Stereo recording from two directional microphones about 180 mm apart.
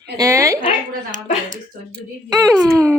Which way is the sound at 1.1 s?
45° right (ahead or behind).